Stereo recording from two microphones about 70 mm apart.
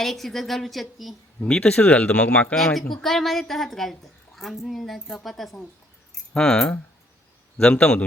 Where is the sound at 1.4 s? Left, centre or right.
Centre.